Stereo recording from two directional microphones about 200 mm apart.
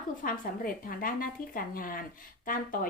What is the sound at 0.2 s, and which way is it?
Speech, 45° left (ahead or behind).